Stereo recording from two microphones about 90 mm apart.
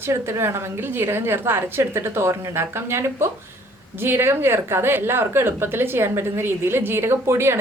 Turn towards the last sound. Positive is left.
turn(degrees=-30)  # may be behind; listen again after turning